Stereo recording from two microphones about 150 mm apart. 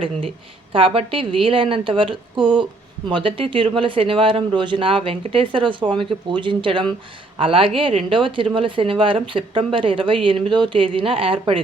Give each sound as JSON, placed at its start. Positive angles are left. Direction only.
{"t": 0.7, "sound": "speech", "side_deg": -35}